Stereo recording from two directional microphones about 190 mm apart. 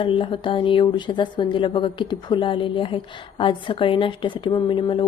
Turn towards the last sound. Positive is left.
turn(degrees=25)  # may be behind; listen again after turning